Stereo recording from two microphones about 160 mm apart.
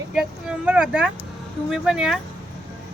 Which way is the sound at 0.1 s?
5° right (ahead or behind).